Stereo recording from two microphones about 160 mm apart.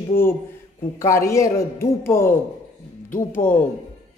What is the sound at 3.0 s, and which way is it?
Speech, 55° left (ahead or behind).